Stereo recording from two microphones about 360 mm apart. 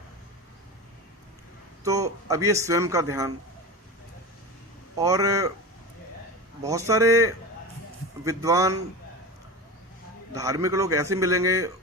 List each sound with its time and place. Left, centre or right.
1.8 s a man's voice: centre
4.9 s a man's voice: centre
6.6 s a man's voice: centre
10.3 s a man's voice: centre